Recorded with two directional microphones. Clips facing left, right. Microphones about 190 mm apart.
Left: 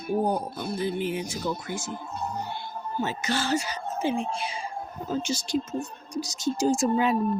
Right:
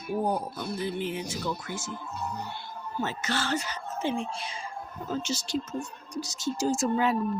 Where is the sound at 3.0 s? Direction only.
15° left (ahead or behind).